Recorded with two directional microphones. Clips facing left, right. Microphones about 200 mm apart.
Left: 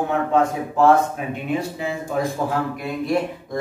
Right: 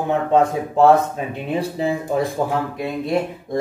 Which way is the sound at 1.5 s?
35° right (ahead or behind).